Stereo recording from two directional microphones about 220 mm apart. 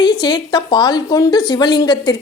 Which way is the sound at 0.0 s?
20° left (ahead or behind).